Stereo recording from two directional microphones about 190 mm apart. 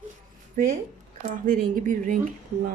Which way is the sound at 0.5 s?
45° right (ahead or behind).